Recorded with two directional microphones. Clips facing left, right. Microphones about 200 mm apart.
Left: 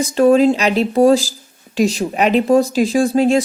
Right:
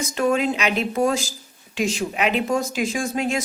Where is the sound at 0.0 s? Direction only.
35° left (ahead or behind).